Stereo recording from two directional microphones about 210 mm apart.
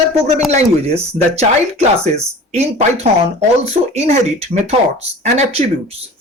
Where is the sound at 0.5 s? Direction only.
30° right (ahead or behind).